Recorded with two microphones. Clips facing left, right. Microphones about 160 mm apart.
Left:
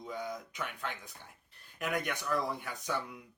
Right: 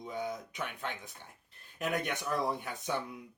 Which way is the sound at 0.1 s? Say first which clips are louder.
Right 2 dB; 20° right (ahead or behind).